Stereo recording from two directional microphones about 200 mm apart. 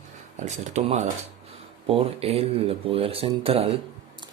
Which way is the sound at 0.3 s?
35° right (ahead or behind).